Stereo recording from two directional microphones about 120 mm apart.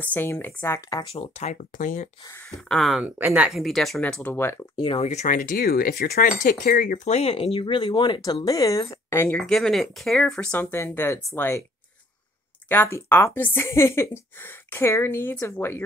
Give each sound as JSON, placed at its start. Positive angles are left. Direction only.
{"t": 0.0, "sound": "speech", "side_deg": 15}
{"t": 0.7, "sound": "speech", "side_deg": 30}
{"t": 1.1, "sound": "speech", "side_deg": 60}
{"t": 2.4, "sound": "speech", "side_deg": 5}
{"t": 3.2, "sound": "speech", "side_deg": -15}
{"t": 4.2, "sound": "speech", "side_deg": 20}
{"t": 4.7, "sound": "speech", "side_deg": 50}
{"t": 5.0, "sound": "speech", "side_deg": 85}
{"t": 6.4, "sound": "speech", "side_deg": 90}
{"t": 9.4, "sound": "speech", "side_deg": 5}
{"t": 12.6, "sound": "speech", "side_deg": 15}